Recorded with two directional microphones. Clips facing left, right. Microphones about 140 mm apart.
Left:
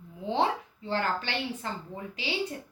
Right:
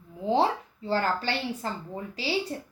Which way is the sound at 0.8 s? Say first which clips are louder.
Right 3 dB; 35° right (ahead or behind).